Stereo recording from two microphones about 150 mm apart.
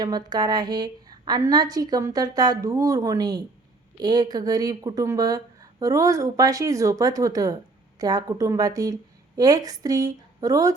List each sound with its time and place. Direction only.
0.0 s a woman's voice: 25° right (ahead or behind)